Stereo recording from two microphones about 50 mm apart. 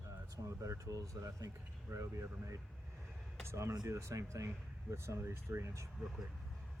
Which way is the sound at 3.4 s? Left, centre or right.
Right.